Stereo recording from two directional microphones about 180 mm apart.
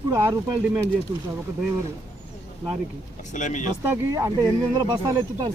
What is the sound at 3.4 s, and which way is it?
Speech, 40° left (ahead or behind).